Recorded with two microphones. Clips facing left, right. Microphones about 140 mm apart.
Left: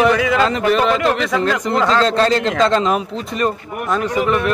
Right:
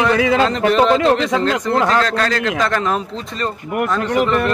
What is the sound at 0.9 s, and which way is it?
Speech, 30° right (ahead or behind).